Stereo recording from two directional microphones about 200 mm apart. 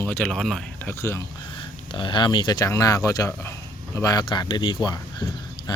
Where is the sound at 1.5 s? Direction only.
25° left (ahead or behind).